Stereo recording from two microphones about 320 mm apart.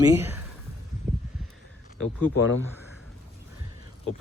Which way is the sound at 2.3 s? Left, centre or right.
Left.